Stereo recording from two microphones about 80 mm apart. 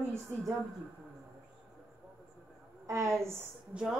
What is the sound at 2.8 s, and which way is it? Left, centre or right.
Speech, right.